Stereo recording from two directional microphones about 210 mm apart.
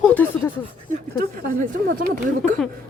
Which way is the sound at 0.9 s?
40° right (ahead or behind).